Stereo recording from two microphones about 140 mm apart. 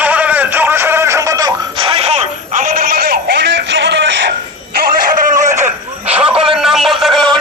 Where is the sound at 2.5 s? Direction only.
85° right.